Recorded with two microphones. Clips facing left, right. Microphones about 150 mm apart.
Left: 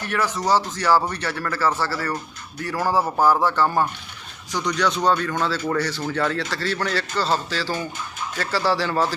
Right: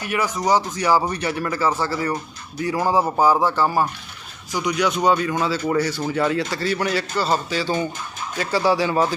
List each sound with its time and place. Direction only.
0.0 s speech: 10° right (ahead or behind)